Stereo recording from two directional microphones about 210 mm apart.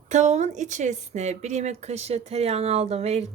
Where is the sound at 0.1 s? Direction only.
35° right (ahead or behind).